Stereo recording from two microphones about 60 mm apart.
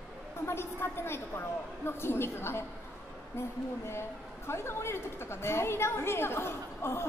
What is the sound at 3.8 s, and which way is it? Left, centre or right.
A woman's voice, left.